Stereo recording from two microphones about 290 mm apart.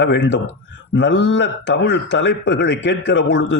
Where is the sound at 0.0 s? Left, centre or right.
Left.